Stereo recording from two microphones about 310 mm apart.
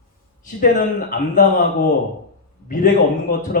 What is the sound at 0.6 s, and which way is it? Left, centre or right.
Speech, left.